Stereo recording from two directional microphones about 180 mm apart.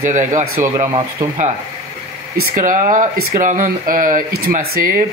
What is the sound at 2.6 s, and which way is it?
A man's voice, 45° right (ahead or behind).